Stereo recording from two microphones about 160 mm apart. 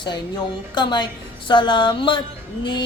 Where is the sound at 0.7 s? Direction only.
25° left (ahead or behind).